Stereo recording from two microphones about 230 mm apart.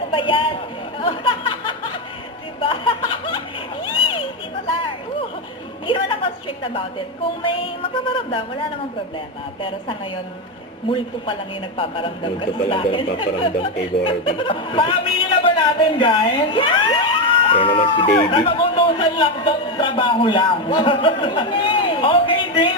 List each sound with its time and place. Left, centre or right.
0.1 s speech: left
2.6 s snicker: left
3.9 s a sound: left
5.8 s a sound: left
7.4 s speech: left
11.8 s speech: left